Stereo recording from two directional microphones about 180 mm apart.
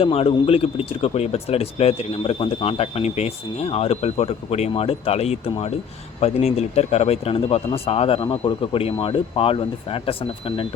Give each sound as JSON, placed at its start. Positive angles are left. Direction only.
{"t": 0.0, "sound": "speech", "side_deg": 30}